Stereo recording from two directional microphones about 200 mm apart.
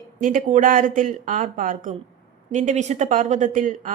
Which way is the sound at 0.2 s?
40° right (ahead or behind).